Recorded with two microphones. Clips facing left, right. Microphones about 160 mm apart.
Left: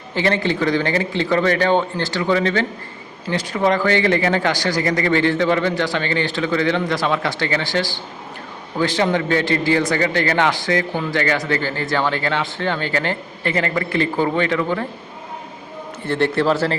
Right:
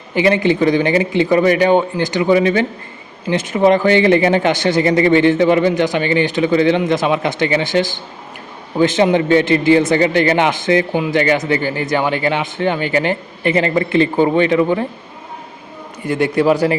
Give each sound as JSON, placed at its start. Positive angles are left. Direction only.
{"t": 0.1, "sound": "a man's voice", "side_deg": -15}
{"t": 16.0, "sound": "a man's voice", "side_deg": -10}